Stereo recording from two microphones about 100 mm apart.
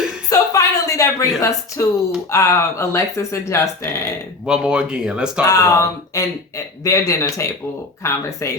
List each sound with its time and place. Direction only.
0.3 s a sound: 35° left (ahead or behind)
2.3 s speech: 30° left (ahead or behind)
4.4 s speech: 10° right (ahead or behind)
5.4 s speech: 35° left (ahead or behind)